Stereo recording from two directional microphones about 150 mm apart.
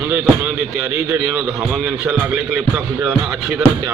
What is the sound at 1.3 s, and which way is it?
Music, 5° right (ahead or behind).